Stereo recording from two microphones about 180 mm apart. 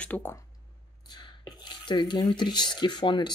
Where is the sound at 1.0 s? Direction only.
25° left (ahead or behind).